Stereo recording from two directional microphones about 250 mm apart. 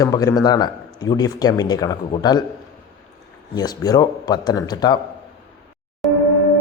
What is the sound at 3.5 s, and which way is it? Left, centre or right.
Speech, centre.